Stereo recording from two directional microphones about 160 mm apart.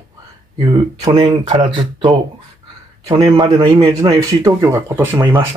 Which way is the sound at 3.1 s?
20° right (ahead or behind).